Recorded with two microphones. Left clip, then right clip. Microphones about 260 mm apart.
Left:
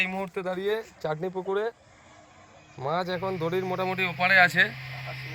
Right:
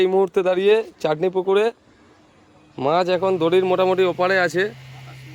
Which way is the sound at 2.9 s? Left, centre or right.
Right.